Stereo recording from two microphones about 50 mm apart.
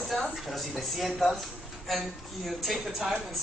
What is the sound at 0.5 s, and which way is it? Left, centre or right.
Speech, centre.